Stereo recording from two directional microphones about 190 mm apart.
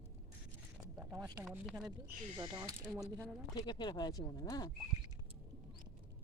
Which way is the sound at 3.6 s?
25° left (ahead or behind).